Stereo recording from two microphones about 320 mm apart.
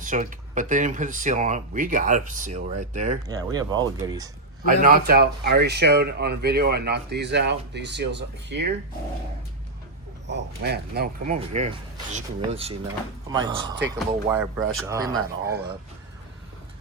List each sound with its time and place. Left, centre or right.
0.0 s speech: right
3.2 s speech: centre
4.6 s speech: right
10.2 s speech: right; by 15.1 s centre